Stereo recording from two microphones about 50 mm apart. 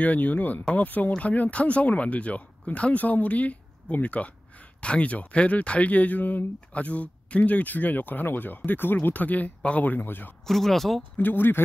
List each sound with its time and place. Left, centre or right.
0.0 s speech: left
10.4 s speech: centre
11.1 s speech: left